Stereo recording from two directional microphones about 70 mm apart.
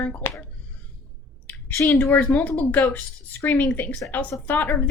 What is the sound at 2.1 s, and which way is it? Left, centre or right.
A woman's voice, left.